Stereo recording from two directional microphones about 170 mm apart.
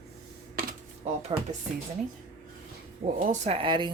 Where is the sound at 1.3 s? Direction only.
30° right (ahead or behind).